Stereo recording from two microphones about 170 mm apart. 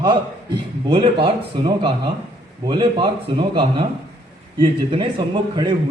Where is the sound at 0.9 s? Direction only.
30° right (ahead or behind).